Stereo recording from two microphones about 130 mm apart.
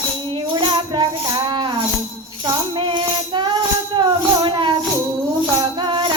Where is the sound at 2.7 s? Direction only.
40° right (ahead or behind).